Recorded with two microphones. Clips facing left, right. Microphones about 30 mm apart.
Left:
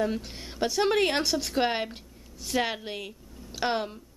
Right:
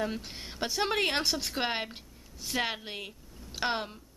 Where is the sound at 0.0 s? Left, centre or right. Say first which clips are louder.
Left 5 dB; centre.